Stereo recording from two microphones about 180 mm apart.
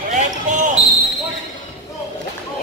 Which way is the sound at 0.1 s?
40° right (ahead or behind).